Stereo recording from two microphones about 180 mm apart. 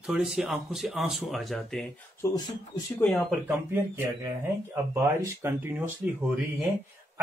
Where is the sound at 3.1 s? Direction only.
Centre (ahead or behind).